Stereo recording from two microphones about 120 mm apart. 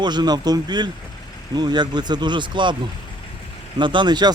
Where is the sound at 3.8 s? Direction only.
40° right (ahead or behind).